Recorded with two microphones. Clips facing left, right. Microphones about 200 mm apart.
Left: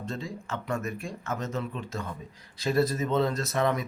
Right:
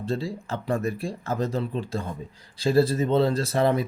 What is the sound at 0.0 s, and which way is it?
A man's voice, 35° right (ahead or behind).